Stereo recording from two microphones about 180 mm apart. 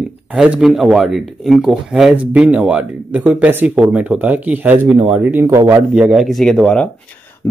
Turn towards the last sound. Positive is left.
turn(degrees=15)  # may be behind; listen again after turning